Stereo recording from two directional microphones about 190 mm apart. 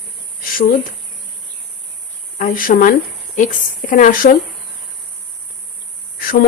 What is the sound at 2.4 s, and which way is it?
A woman's voice, 45° left (ahead or behind).